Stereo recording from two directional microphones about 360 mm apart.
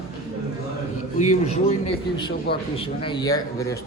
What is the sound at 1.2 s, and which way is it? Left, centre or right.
A man's voice, centre.